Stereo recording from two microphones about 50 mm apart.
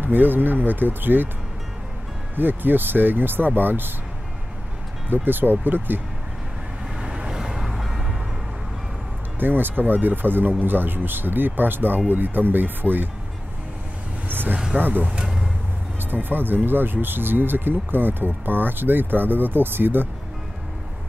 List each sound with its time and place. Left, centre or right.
0.0 s speech: right
2.3 s speech: right
5.1 s speech: right
7.0 s vehicle: right
7.2 s music: centre
9.4 s speech: right
14.3 s vehicle: right
14.8 s speech: right
15.1 s vehicle: centre
16.0 s speech: right